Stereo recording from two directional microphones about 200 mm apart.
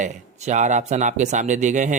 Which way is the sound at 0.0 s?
35° right (ahead or behind).